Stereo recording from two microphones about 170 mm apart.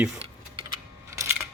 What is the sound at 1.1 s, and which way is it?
Camera, 15° right (ahead or behind).